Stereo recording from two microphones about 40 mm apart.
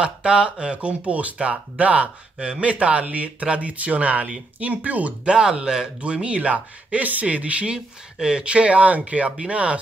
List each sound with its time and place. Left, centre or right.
0.0 s speech: right
5.2 s speech: right